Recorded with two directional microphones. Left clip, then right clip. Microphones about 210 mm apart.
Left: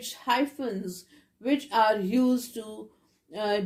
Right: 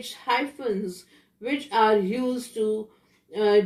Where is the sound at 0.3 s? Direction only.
40° left (ahead or behind).